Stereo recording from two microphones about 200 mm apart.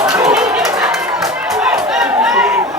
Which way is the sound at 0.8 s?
5° right (ahead or behind).